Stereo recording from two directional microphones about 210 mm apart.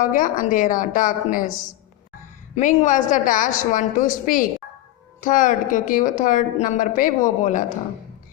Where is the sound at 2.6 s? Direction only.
35° left (ahead or behind).